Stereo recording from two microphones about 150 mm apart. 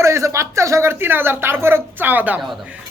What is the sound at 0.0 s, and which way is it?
Speech, 20° right (ahead or behind).